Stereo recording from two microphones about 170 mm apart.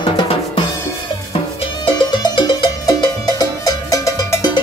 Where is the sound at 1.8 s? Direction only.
25° left (ahead or behind).